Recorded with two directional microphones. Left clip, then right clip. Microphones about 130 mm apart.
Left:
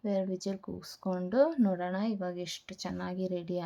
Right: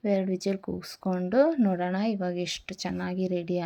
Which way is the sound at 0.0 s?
20° right (ahead or behind).